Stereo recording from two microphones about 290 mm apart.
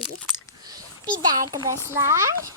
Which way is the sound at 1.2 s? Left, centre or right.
Centre.